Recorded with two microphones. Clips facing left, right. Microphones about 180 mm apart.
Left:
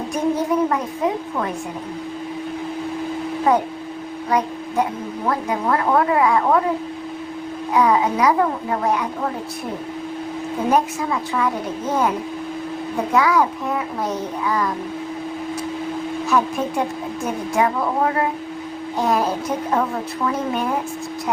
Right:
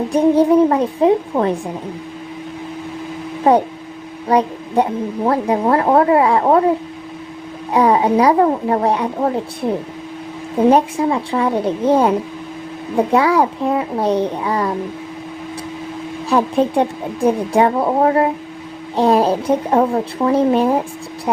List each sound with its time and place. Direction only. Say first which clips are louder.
0.1 s a woman's voice: right 8 dB; 30° right (ahead or behind)
3.5 s a woman's voice: right 6 dB; 30° right (ahead or behind)
7.7 s a woman's voice: right 4 dB; 30° right (ahead or behind)
10.7 s a woman's voice: right 5 dB; 30° right (ahead or behind)
16.3 s a woman's voice: right 6 dB; 30° right (ahead or behind)